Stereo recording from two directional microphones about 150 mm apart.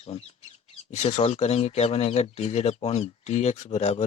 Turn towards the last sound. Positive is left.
turn(degrees=50)  # may be behind; listen again after turning